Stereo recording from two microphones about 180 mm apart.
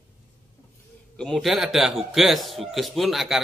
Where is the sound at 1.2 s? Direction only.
Centre (ahead or behind).